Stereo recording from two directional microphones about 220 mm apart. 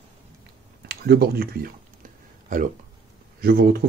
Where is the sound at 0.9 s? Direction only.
45° right (ahead or behind).